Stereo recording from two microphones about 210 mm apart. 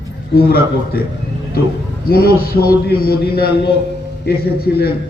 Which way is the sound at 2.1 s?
45° left (ahead or behind).